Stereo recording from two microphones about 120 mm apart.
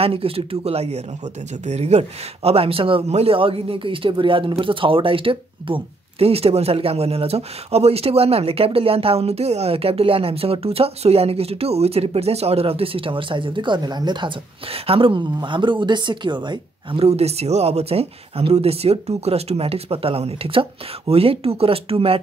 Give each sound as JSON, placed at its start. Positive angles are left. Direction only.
{"t": 0.0, "sound": "speech", "side_deg": -50}
{"t": 14.7, "sound": "speech", "side_deg": -50}
{"t": 17.0, "sound": "speech", "side_deg": -60}